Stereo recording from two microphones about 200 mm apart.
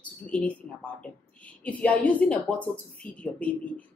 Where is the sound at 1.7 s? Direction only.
5° left (ahead or behind).